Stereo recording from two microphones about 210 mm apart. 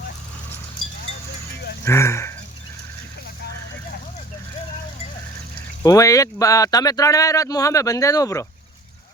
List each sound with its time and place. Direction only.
1.8 s speech: 10° left (ahead or behind)
5.8 s speech: 15° left (ahead or behind)